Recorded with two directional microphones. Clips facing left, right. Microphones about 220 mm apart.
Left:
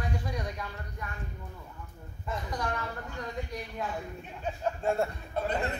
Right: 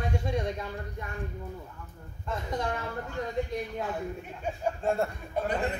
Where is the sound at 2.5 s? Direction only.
25° right (ahead or behind).